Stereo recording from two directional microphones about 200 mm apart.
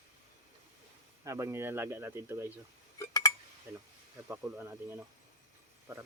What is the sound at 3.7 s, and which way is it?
Speech, 10° right (ahead or behind).